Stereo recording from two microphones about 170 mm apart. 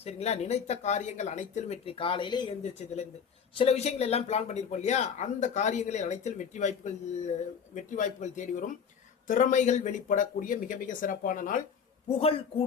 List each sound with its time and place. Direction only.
0.0 s speech: 40° left (ahead or behind)
2.7 s speech: 40° left (ahead or behind)
12.0 s speech: 35° left (ahead or behind)